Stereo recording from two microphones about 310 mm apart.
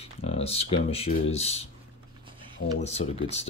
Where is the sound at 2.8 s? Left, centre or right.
Centre.